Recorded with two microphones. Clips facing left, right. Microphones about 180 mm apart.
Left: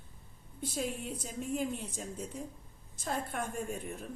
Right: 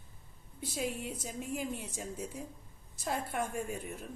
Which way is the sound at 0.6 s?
10° right (ahead or behind).